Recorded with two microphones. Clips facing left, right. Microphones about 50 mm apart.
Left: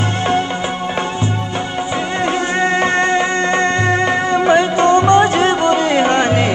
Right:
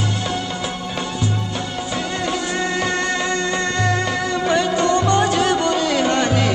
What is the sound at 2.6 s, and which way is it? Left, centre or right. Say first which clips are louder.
Music: left 8 dB; left.